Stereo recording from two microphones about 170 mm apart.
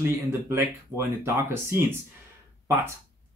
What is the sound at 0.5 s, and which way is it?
Speech, 15° right (ahead or behind).